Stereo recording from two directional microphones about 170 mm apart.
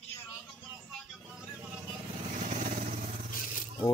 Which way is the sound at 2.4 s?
45° right (ahead or behind).